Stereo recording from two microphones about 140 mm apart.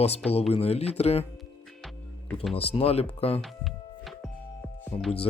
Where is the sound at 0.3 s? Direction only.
45° left (ahead or behind).